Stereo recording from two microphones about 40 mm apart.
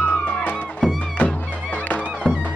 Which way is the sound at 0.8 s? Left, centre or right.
Centre.